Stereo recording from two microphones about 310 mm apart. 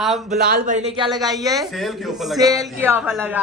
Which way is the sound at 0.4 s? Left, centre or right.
Right.